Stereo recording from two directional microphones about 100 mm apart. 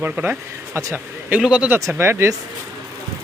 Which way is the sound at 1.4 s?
10° right (ahead or behind).